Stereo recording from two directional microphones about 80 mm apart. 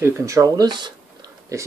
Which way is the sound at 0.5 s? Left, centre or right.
Right.